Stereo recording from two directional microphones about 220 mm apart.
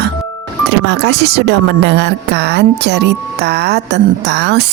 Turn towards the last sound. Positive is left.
turn(degrees=-50)  # may be behind; listen again after turning